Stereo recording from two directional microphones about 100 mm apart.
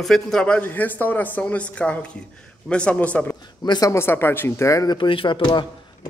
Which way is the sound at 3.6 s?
45° left (ahead or behind).